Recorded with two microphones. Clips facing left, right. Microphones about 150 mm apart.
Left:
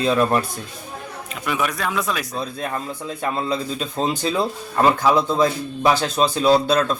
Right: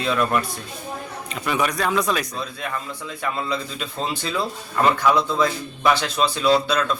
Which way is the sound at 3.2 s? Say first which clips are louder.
Left 3 dB; 35° left (ahead or behind).